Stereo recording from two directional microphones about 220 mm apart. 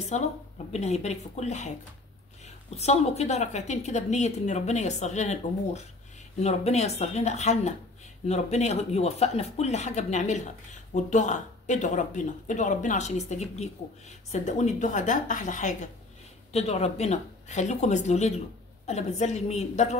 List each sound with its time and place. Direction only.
0.1 s speech: 30° left (ahead or behind)
2.7 s speech: 30° left (ahead or behind)